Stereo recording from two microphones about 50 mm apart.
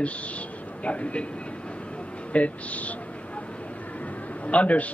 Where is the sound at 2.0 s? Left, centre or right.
Left.